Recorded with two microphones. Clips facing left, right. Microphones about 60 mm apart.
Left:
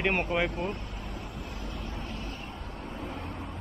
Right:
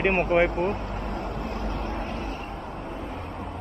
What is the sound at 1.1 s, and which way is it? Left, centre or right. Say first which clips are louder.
Vehicle: right 9 dB; right.